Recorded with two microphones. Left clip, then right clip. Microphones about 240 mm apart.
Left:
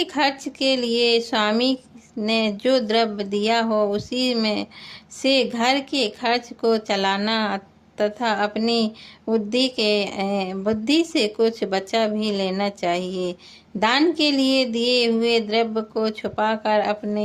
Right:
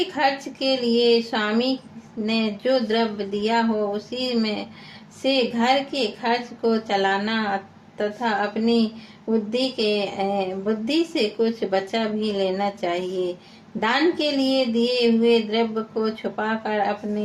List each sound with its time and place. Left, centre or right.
0.0 s a woman's voice: left